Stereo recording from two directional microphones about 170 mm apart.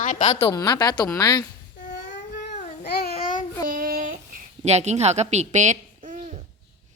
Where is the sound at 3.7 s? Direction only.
55° right (ahead or behind).